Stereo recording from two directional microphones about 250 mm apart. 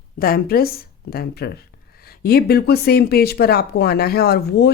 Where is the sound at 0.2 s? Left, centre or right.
Left.